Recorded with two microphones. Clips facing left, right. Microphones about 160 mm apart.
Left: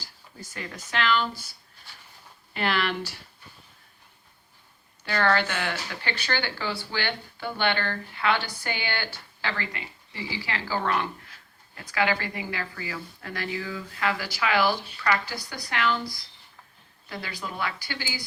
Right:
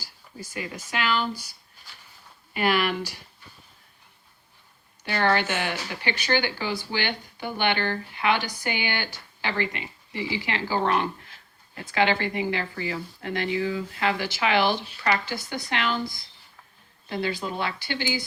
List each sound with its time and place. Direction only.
0.0 s speech: 10° right (ahead or behind)
2.5 s speech: 10° right (ahead or behind)
5.0 s speech: 20° right (ahead or behind)